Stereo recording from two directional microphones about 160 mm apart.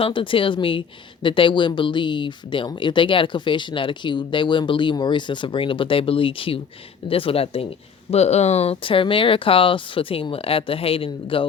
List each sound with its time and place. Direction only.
0.0 s a woman's voice: 35° left (ahead or behind)